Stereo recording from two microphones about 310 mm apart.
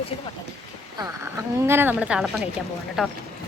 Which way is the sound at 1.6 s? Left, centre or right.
Centre.